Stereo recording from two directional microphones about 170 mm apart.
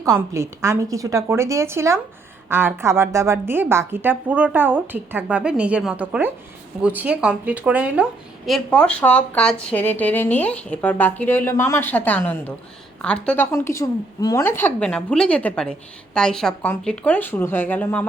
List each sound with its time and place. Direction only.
0.0 s a woman's voice: 20° right (ahead or behind)
8.4 s speech: 5° left (ahead or behind)